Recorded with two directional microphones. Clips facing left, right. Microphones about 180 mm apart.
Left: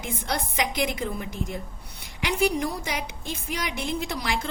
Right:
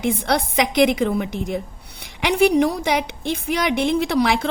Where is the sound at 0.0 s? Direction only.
75° right (ahead or behind).